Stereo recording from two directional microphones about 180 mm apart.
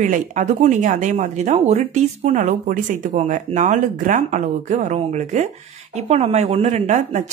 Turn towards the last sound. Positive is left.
turn(degrees=-40)  # may be behind; listen again after turning